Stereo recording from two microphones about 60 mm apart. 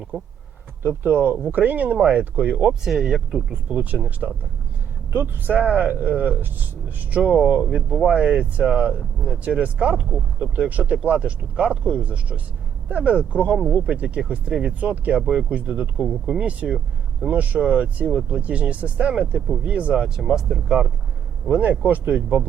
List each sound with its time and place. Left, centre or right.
0.1 s speech: centre
0.8 s speech: right
2.8 s speech: centre
3.5 s speech: right
4.2 s speech: centre
5.1 s speech: right
7.2 s speech: centre
16.7 s a sound: centre
17.3 s speech: right; by 20.6 s centre
21.5 s speech: right